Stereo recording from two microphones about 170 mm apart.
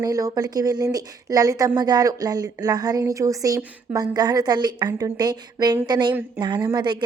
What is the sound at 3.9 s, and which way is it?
A woman's voice, 20° right (ahead or behind).